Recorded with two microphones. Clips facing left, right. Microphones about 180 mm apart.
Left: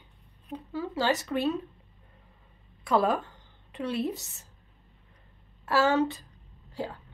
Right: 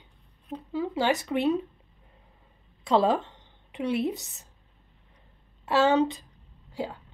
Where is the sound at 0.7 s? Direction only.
15° right (ahead or behind).